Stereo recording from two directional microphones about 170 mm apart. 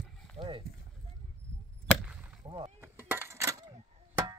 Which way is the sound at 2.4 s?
25° right (ahead or behind).